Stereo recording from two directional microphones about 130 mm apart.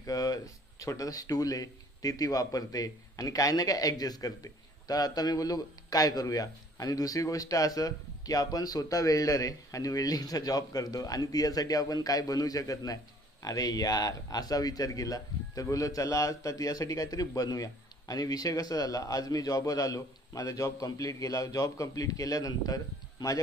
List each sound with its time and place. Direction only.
0.0 s speech: 30° left (ahead or behind)